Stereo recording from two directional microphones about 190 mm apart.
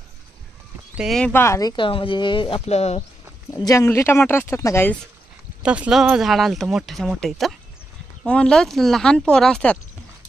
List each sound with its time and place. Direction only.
0.9 s speech: centre (ahead or behind); by 3.0 s 35° left (ahead or behind)
3.5 s speech: 15° left (ahead or behind)
5.6 s speech: 5° right (ahead or behind)